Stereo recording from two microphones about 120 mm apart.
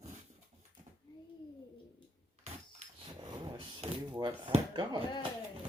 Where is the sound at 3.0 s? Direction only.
40° right (ahead or behind).